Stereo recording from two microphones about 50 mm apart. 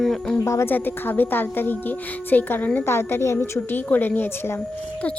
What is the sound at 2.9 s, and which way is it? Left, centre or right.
Speech, left.